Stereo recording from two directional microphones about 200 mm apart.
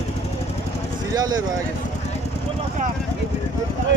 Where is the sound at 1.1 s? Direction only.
20° right (ahead or behind).